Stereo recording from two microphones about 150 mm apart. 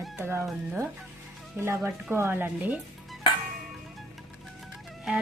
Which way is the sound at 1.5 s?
15° right (ahead or behind).